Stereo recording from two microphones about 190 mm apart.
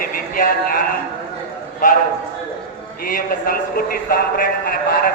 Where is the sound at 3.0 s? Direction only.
50° left (ahead or behind).